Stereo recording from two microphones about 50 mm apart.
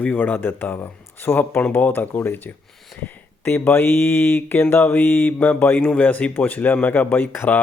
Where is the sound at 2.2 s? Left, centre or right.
Left.